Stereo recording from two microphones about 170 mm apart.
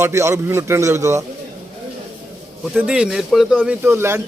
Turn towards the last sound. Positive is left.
turn(degrees=-15)  # may be behind; listen again after turning